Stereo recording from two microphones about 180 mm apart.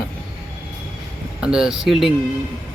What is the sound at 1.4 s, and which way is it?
Speech, 5° right (ahead or behind).